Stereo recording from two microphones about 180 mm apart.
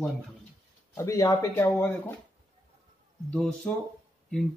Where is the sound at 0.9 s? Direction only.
15° left (ahead or behind).